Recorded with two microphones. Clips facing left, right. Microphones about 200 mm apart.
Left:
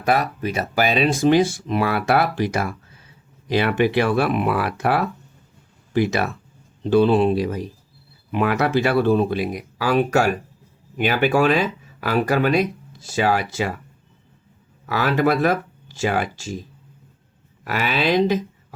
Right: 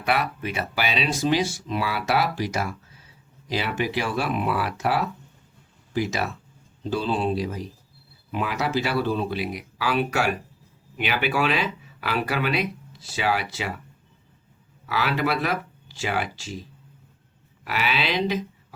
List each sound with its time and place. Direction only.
0.0 s speech: 40° left (ahead or behind)
14.8 s speech: 50° left (ahead or behind)
17.7 s speech: 45° left (ahead or behind)